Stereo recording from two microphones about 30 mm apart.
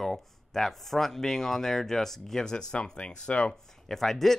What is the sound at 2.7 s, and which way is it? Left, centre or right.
Speech, left.